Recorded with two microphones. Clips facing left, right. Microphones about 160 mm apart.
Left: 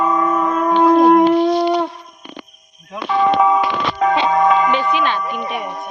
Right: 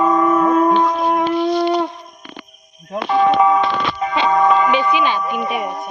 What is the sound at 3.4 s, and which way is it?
Music, 5° left (ahead or behind).